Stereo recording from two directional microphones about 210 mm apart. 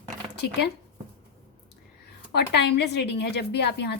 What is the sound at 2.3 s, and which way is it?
A woman's voice, 55° left (ahead or behind).